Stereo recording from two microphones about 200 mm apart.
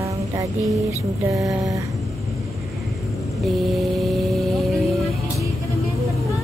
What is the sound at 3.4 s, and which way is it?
Vehicle, centre (ahead or behind).